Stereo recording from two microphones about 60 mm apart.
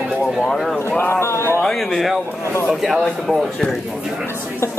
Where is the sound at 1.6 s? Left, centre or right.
Centre.